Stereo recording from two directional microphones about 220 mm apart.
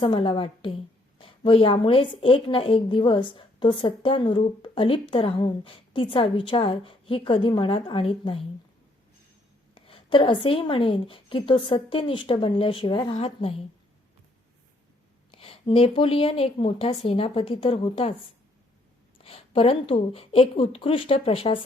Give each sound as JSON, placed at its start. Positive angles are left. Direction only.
{"t": 0.0, "sound": "a woman's voice", "side_deg": 25}
{"t": 9.7, "sound": "a woman's voice", "side_deg": 25}
{"t": 15.3, "sound": "a woman's voice", "side_deg": 25}
{"t": 19.2, "sound": "a woman's voice", "side_deg": 25}